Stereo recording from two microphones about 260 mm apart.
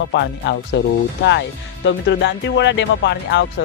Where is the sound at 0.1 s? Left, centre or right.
Left.